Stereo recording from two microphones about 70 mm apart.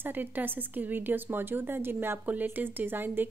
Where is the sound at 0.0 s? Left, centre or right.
Right.